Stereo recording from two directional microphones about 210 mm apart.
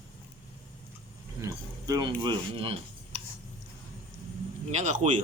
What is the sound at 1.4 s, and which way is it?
Speech, 15° right (ahead or behind).